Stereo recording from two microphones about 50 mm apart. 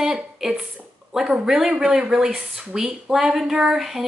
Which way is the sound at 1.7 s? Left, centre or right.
Right.